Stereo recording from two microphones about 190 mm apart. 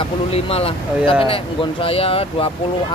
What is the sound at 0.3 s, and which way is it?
Speech, 30° left (ahead or behind).